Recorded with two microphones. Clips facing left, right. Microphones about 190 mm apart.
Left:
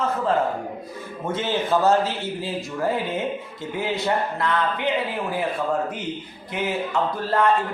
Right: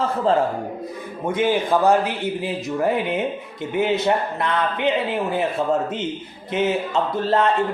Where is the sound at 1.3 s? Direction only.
15° right (ahead or behind).